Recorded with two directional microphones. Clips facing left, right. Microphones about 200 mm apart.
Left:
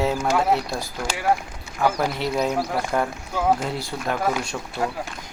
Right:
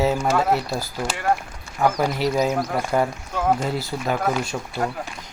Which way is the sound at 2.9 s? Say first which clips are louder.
Right 4 dB; 5° left (ahead or behind).